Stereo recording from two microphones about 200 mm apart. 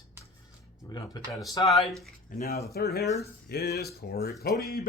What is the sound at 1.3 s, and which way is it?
Speech, centre (ahead or behind).